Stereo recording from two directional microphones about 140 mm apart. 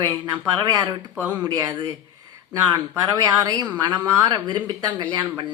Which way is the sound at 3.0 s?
25° right (ahead or behind).